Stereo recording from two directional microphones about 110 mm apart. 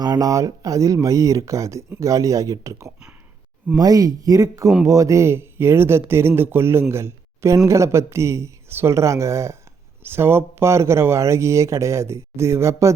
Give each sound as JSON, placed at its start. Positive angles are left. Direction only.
{"t": 0.0, "sound": "speech", "side_deg": -35}